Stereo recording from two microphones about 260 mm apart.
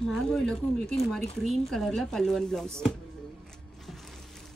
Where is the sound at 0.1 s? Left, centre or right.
Centre.